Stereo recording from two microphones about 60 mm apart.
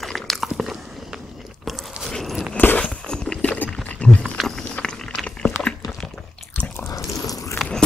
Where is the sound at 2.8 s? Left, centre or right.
Centre.